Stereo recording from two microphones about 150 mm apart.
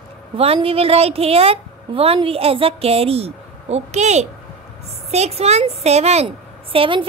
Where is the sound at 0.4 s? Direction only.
40° right (ahead or behind).